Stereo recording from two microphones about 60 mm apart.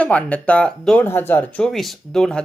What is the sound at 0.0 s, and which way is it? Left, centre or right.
Speech, left.